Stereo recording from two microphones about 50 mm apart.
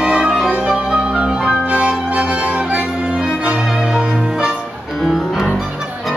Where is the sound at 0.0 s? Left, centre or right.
Right.